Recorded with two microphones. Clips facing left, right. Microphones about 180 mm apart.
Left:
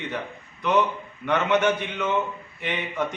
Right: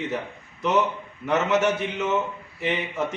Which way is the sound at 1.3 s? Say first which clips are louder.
Even; 5° right (ahead or behind).